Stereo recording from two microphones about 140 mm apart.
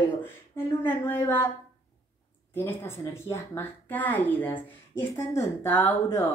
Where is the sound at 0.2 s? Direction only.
15° left (ahead or behind).